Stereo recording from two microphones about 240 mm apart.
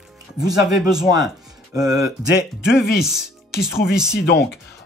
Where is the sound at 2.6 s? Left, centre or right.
Centre.